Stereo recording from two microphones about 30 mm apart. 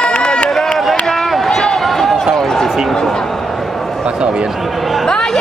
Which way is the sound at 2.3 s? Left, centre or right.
Centre.